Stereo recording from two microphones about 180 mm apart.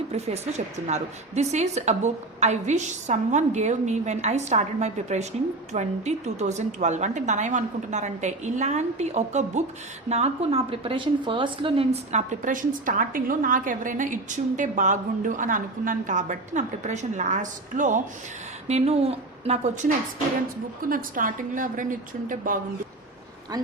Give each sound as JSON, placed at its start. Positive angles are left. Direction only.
{"t": 0.1, "sound": "a woman's voice", "side_deg": -40}
{"t": 20.9, "sound": "a woman's voice", "side_deg": -50}
{"t": 23.5, "sound": "speech", "side_deg": -20}